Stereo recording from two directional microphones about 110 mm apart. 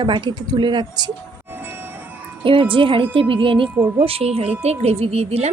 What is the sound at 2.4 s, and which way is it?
A woman's voice, 50° right (ahead or behind).